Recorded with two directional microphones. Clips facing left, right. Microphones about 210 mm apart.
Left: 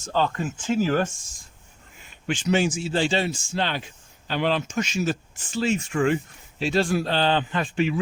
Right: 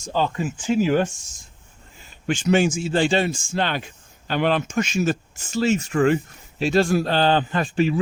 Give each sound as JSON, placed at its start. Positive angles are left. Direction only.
{"t": 0.0, "sound": "speech", "side_deg": -10}
{"t": 2.0, "sound": "speech", "side_deg": -40}